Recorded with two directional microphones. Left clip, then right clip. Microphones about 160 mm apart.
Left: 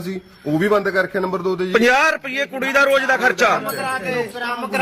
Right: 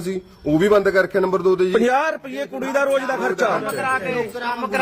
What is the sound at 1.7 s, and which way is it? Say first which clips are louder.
A man's voice: left 3 dB; centre (ahead or behind).